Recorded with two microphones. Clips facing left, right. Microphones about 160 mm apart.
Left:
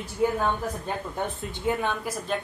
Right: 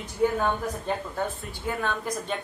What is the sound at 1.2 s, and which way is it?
Speech, 20° left (ahead or behind).